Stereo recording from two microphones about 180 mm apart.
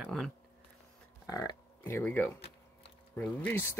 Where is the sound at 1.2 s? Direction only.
20° left (ahead or behind).